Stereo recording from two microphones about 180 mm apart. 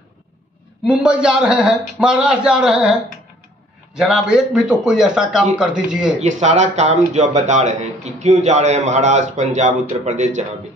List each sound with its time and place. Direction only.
0.8 s a man's voice: 5° right (ahead or behind)
6.2 s a man's voice: 40° right (ahead or behind)